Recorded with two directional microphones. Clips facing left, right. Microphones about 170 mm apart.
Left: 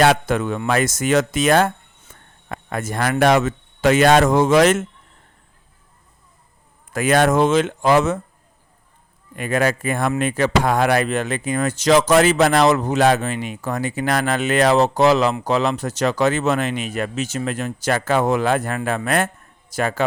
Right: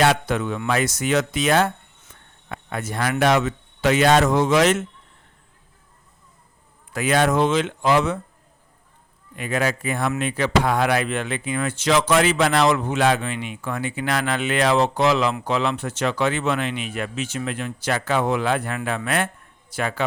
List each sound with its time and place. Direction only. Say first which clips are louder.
0.0 s speech: left 3 dB; 50° left (ahead or behind)
6.9 s speech: left 3 dB; 45° left (ahead or behind)
9.3 s speech: left 4 dB; 50° left (ahead or behind)